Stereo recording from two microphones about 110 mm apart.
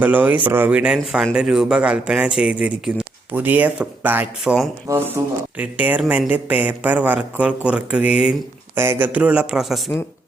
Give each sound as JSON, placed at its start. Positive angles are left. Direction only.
{"t": 0.0, "sound": "a man's voice", "side_deg": -15}
{"t": 4.4, "sound": "speech", "side_deg": -5}
{"t": 4.9, "sound": "a man's voice", "side_deg": -25}